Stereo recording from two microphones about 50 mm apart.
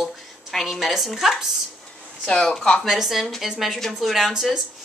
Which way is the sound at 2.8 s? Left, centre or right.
Centre.